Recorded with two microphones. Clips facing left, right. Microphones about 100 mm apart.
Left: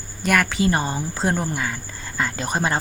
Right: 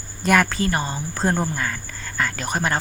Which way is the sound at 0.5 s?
20° left (ahead or behind).